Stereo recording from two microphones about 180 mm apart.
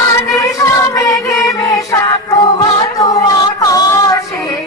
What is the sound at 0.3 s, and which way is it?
Music, 20° left (ahead or behind).